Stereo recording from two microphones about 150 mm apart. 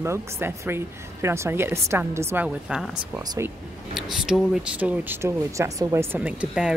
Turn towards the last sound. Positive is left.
turn(degrees=-5)  # may be behind; listen again after turning